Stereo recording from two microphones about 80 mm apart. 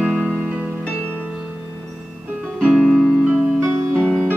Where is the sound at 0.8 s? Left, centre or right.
Centre.